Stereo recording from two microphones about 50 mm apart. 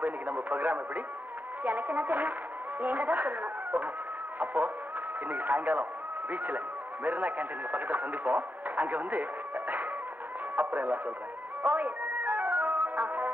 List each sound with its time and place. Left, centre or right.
0.0 s a man's voice: right
11.6 s music: right